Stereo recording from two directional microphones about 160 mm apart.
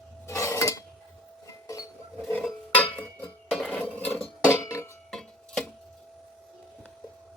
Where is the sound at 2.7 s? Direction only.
10° left (ahead or behind).